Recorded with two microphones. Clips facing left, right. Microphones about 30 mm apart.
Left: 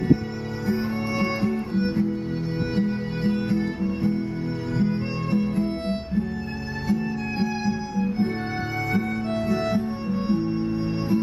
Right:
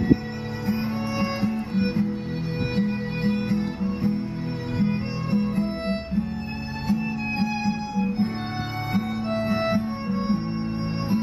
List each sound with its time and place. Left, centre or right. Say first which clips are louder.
0.7 s music: left 1 dB; centre